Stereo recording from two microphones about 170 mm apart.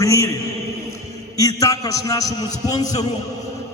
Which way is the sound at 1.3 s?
20° left (ahead or behind).